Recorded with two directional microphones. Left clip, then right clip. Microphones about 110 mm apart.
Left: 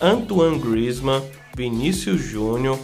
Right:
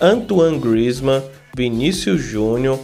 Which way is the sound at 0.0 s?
35° right (ahead or behind).